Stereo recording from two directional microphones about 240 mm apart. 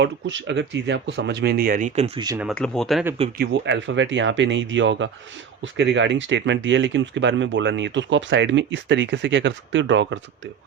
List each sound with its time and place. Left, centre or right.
0.0 s speech: right; by 2.5 s centre
2.5 s speech: centre
3.3 s speech: right